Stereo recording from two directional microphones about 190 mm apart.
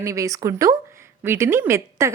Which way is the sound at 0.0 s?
15° right (ahead or behind).